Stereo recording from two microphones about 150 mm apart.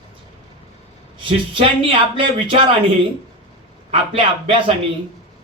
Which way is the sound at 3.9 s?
35° right (ahead or behind).